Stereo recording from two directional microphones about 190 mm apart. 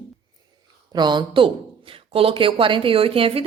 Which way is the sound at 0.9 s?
25° right (ahead or behind).